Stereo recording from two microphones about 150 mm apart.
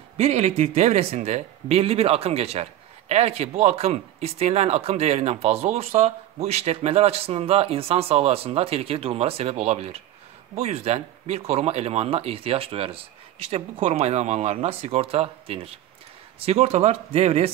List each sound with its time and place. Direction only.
0.2 s speech: 40° right (ahead or behind)